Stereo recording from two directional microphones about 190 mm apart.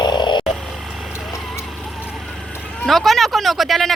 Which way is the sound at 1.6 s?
Centre (ahead or behind).